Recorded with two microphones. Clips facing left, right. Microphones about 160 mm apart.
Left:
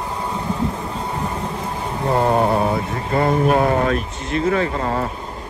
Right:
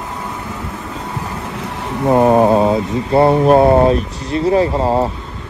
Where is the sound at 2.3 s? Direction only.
20° right (ahead or behind).